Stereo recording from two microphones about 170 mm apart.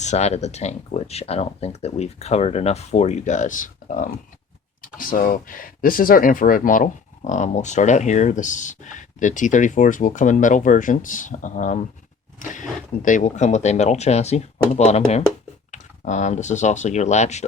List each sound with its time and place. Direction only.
0.0 s speech: 40° left (ahead or behind)